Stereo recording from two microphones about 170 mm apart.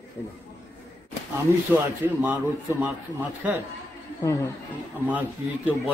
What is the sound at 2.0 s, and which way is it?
Speech, 10° right (ahead or behind).